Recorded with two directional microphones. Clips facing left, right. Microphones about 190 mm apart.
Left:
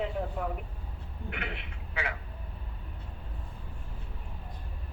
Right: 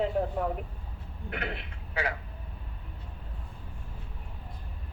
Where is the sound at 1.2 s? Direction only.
35° right (ahead or behind).